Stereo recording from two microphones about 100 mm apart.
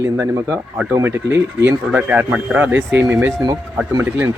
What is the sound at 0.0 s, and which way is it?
Speech, 25° right (ahead or behind).